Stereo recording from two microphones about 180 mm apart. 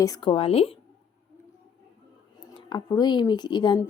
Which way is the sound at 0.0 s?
25° left (ahead or behind).